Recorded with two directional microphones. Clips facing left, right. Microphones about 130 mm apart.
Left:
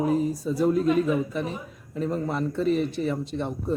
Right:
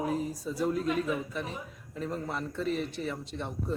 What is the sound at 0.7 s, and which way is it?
Speech, 35° left (ahead or behind).